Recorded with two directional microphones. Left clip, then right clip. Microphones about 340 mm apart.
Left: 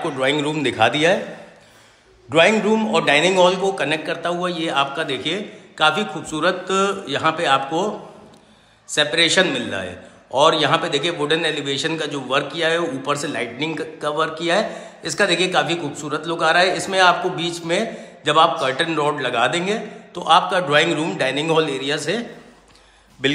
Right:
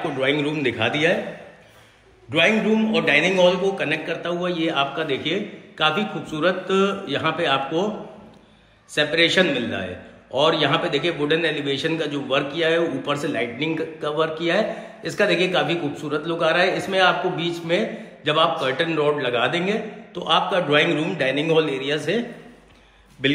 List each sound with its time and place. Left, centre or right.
0.0 s a man's voice: centre
2.4 s a man's voice: left
2.9 s a man's voice: centre
8.9 s a man's voice: centre